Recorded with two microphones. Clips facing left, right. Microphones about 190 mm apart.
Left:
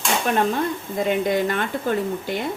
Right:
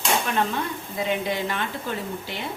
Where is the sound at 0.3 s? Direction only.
45° left (ahead or behind).